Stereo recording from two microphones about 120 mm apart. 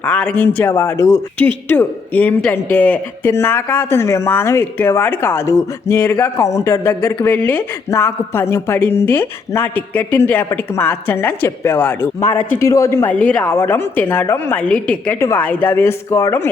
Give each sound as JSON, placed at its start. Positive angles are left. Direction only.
{"t": 0.0, "sound": "a woman's voice", "side_deg": 10}
{"t": 0.7, "sound": "speech", "side_deg": 25}
{"t": 1.7, "sound": "a woman's voice", "side_deg": 15}